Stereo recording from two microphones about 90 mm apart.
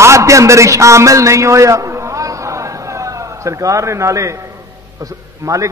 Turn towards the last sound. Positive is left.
turn(degrees=-35)  # may be behind; listen again after turning